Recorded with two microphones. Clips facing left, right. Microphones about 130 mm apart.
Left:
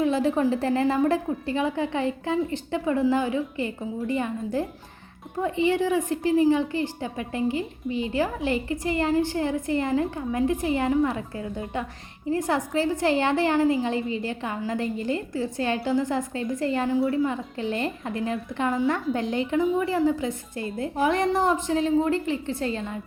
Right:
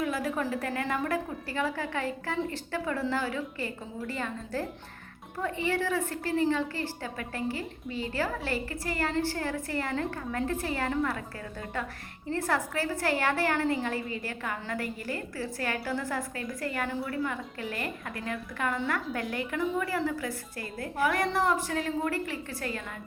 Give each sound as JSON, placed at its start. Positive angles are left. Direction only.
{"t": 0.0, "sound": "a woman's voice", "side_deg": 25}